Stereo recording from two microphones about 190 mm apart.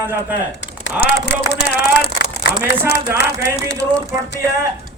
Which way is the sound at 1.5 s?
60° left (ahead or behind).